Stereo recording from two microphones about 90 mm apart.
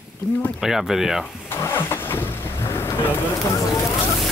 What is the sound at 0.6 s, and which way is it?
Speech, 5° right (ahead or behind).